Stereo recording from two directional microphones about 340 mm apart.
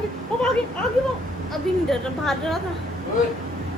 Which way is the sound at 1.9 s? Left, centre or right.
Centre.